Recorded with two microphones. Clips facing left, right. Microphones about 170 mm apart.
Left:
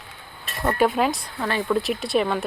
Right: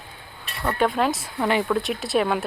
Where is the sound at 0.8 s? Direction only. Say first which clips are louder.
Left 1 dB; centre (ahead or behind).